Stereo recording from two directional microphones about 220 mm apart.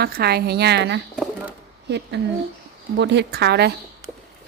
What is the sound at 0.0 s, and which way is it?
Speech, 45° right (ahead or behind).